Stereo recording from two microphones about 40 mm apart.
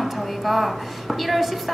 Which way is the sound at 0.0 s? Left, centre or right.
Centre.